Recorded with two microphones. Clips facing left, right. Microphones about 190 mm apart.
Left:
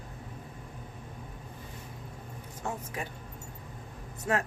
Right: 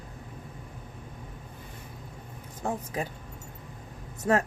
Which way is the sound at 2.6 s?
35° right (ahead or behind).